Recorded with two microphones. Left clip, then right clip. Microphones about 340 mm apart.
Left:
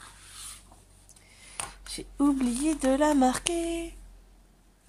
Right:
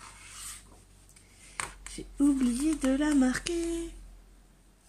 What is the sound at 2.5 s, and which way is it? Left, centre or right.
Speech, centre.